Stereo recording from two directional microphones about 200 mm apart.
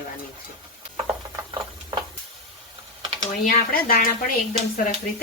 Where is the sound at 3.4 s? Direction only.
45° left (ahead or behind).